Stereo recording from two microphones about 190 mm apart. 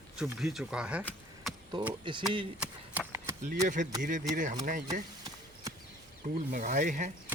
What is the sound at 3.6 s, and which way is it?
Speech, 40° right (ahead or behind).